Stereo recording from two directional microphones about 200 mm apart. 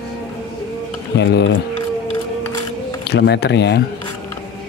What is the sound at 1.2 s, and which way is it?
Speech, 65° left (ahead or behind).